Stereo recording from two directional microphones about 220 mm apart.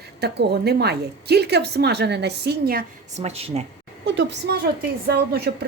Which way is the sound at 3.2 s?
30° right (ahead or behind).